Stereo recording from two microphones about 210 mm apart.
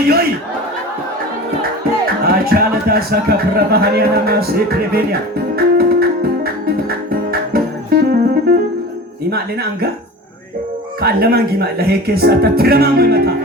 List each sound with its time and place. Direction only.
2.0 s speech: 45° right (ahead or behind)
5.5 s music: 45° right (ahead or behind)
9.3 s speech: 50° right (ahead or behind)
11.0 s speech: 50° right (ahead or behind)